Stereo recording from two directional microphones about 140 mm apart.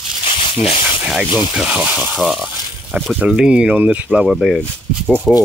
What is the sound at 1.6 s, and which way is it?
Speech, 10° right (ahead or behind).